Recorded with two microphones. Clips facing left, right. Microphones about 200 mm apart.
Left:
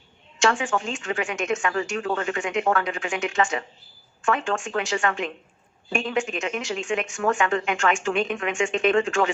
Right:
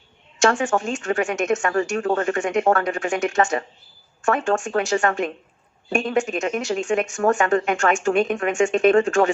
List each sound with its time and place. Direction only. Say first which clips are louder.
0.3 s speech: right 4 dB; 45° right (ahead or behind)